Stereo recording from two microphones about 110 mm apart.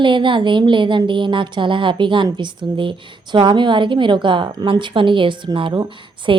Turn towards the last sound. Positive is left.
turn(degrees=-50)  # may be behind; listen again after turning